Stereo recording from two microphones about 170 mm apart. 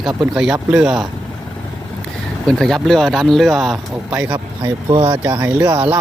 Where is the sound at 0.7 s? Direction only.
5° right (ahead or behind).